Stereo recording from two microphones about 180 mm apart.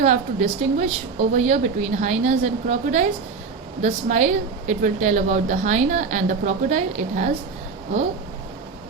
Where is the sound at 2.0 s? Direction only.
40° right (ahead or behind).